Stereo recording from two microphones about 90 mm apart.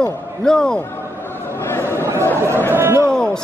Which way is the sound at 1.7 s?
25° left (ahead or behind).